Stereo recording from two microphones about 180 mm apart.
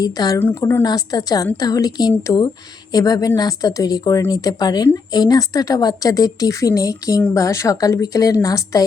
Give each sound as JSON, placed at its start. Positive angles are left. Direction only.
{"t": 0.0, "sound": "a woman's voice", "side_deg": 20}